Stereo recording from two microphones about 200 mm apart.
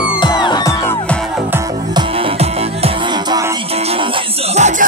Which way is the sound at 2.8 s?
20° right (ahead or behind).